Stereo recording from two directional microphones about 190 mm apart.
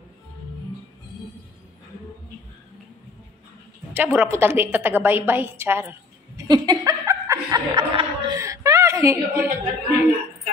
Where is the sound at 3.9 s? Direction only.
10° right (ahead or behind).